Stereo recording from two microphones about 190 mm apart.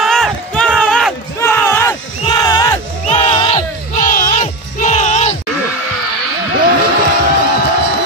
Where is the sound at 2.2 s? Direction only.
20° left (ahead or behind).